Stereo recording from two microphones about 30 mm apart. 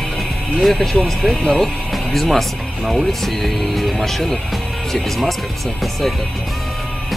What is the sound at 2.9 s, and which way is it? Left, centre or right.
Speech, centre.